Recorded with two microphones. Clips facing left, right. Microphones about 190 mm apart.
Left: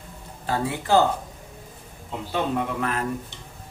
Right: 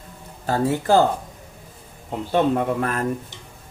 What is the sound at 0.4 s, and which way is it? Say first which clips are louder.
Speech: right 5 dB; 45° right (ahead or behind).